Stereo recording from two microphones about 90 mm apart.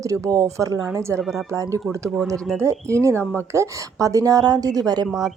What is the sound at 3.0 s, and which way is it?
A woman's voice, 30° right (ahead or behind).